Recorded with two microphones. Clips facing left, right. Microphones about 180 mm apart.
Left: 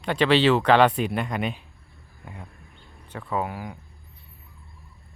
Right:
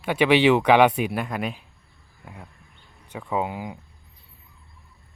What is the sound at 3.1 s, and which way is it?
Speech, 15° right (ahead or behind).